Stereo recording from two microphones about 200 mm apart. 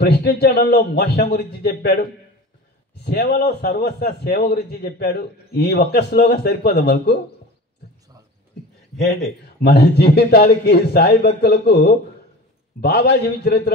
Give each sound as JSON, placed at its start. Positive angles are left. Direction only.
{"t": 0.0, "sound": "a man's voice", "side_deg": 55}
{"t": 3.0, "sound": "a man's voice", "side_deg": 50}
{"t": 9.6, "sound": "a man's voice", "side_deg": 55}